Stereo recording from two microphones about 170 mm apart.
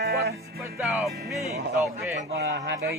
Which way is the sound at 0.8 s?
Centre (ahead or behind).